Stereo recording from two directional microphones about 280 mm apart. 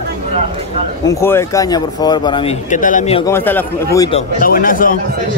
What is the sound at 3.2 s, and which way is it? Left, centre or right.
Speech, centre.